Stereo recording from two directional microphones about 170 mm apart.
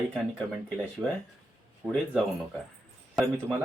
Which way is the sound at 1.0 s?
15° right (ahead or behind).